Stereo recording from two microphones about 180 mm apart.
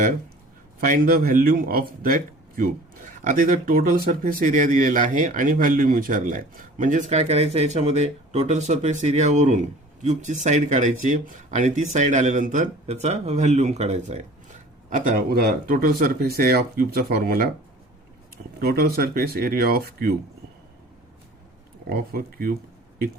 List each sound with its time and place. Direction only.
0.8 s speech: 50° right (ahead or behind)
14.8 s speech: 50° right (ahead or behind)
18.6 s speech: 60° right (ahead or behind)
21.8 s speech: 60° right (ahead or behind)